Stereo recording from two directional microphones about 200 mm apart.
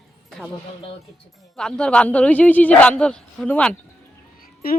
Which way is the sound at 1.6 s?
5° left (ahead or behind).